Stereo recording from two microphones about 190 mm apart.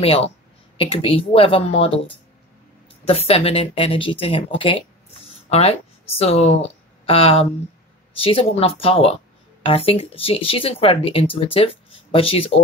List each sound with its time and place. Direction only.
0.0 s speech: 30° left (ahead or behind)